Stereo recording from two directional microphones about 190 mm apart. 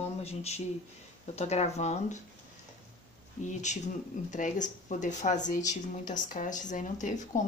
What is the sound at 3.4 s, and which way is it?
Speech, 40° left (ahead or behind).